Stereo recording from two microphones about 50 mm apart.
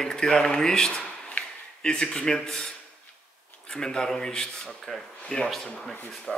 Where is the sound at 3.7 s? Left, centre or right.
Centre.